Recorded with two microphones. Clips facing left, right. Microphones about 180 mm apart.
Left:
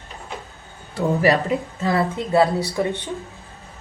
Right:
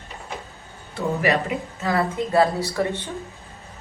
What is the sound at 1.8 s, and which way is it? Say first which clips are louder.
A woman's voice: right 1 dB; 25° left (ahead or behind).